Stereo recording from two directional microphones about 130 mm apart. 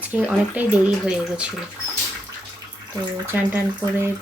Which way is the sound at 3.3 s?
15° right (ahead or behind).